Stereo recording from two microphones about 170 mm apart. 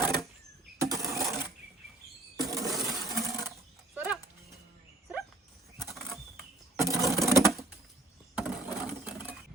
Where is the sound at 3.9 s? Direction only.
10° right (ahead or behind).